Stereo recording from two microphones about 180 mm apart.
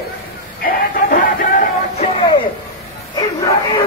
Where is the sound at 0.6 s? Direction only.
50° left (ahead or behind).